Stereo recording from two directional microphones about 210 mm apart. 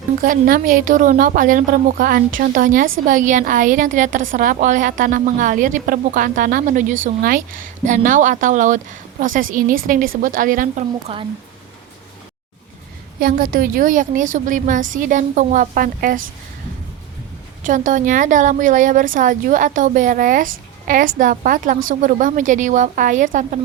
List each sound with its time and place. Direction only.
0.2 s speech: 40° right (ahead or behind)
11.1 s speech: 25° right (ahead or behind)
13.1 s speech: 45° right (ahead or behind)
17.6 s speech: 40° right (ahead or behind)